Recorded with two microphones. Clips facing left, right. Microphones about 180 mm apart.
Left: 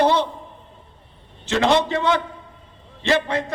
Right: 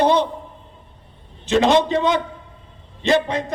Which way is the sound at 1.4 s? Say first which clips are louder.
Right 3 dB; 15° right (ahead or behind).